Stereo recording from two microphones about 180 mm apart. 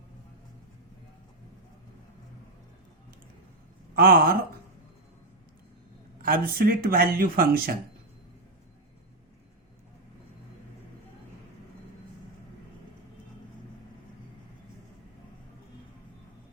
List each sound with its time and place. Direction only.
3.9 s speech: 55° right (ahead or behind)
6.2 s speech: 55° right (ahead or behind)